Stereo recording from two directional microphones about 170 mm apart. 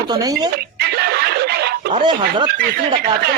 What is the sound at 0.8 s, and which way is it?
Snicker, 70° right (ahead or behind).